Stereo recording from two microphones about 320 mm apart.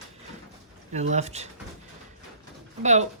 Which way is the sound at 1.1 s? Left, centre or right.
Right.